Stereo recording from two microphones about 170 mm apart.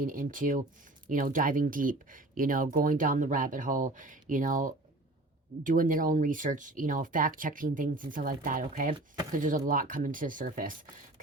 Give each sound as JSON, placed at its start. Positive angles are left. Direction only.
{"t": 0.0, "sound": "speech", "side_deg": -50}